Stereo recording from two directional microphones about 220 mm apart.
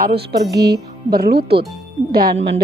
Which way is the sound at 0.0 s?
45° right (ahead or behind).